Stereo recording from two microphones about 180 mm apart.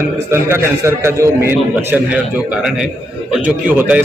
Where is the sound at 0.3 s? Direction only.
15° right (ahead or behind).